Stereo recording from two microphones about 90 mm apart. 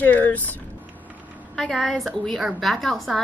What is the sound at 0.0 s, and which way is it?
Speech, 20° left (ahead or behind).